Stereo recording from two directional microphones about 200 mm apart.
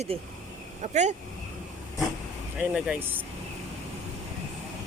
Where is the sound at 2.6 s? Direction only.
5° right (ahead or behind).